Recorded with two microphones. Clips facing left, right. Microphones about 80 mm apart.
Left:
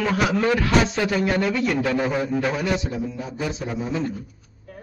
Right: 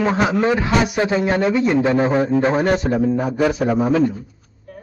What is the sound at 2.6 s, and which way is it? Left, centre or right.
A man's voice, right.